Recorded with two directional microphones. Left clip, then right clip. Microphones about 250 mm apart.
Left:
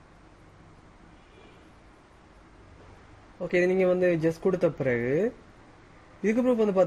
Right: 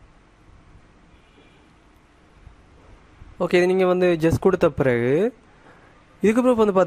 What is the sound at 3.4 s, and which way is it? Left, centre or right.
Speech, right.